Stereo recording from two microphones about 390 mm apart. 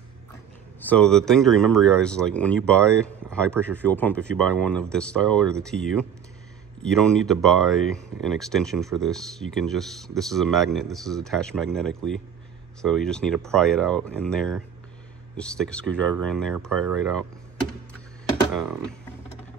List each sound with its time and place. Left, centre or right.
0.7 s speech: centre
18.5 s speech: centre